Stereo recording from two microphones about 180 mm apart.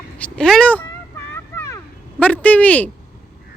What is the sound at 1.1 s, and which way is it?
Vehicle, 15° left (ahead or behind).